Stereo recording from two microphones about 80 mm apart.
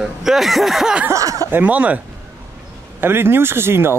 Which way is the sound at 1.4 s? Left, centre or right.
Right.